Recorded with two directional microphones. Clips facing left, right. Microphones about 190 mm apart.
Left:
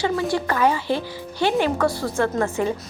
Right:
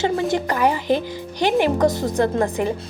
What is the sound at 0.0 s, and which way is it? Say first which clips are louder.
A woman's voice: right 2 dB; 20° right (ahead or behind).